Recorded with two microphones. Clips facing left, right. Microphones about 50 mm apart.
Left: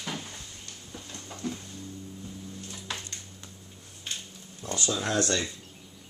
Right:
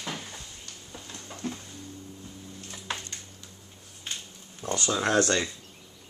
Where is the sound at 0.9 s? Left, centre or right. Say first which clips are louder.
Even; centre.